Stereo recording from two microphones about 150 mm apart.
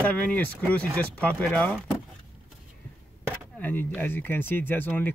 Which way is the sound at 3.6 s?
10° left (ahead or behind).